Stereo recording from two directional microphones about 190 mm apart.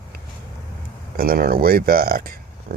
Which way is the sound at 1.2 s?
50° right (ahead or behind).